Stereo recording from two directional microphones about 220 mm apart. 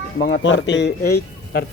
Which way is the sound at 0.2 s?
50° left (ahead or behind).